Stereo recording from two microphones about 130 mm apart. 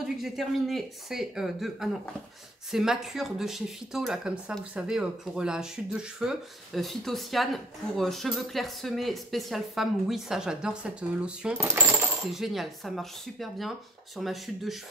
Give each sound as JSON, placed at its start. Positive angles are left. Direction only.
{"t": 0.0, "sound": "speech", "side_deg": 0}
{"t": 11.6, "sound": "coin", "side_deg": -15}
{"t": 12.3, "sound": "speech", "side_deg": 0}